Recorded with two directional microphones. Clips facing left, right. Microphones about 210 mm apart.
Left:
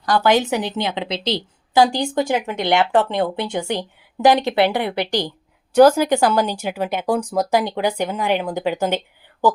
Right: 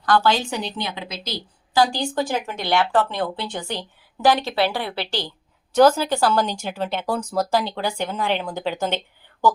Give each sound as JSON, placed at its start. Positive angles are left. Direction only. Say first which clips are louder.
{"t": 0.0, "sound": "a woman's voice", "louder": "left 3 dB", "side_deg": 15}